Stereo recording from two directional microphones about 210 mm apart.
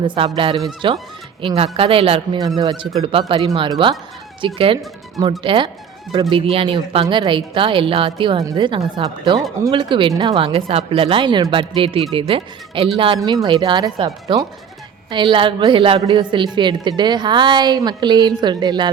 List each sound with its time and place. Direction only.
0.0 s a woman's voice: 25° right (ahead or behind)